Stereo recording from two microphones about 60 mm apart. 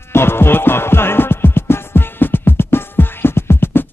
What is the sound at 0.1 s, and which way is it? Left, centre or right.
Music, left.